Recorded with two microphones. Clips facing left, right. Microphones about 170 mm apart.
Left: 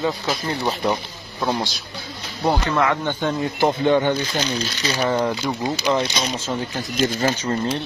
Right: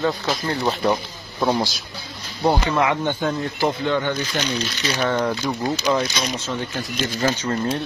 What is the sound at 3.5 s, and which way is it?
Speech, 20° left (ahead or behind).